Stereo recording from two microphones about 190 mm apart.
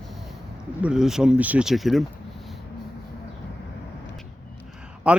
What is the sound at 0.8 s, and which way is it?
Speech, 5° right (ahead or behind).